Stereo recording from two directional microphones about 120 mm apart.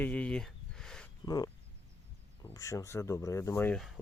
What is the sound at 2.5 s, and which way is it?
Speech, 25° left (ahead or behind).